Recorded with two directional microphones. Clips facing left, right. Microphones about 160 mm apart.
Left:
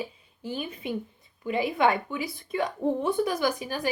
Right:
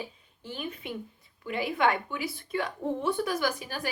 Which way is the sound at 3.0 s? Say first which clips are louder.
Left 1 dB; 20° left (ahead or behind).